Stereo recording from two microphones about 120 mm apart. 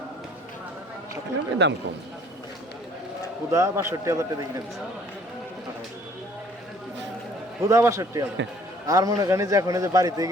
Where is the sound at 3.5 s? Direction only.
25° right (ahead or behind).